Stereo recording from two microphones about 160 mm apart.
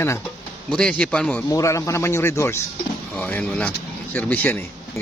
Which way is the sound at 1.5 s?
20° left (ahead or behind).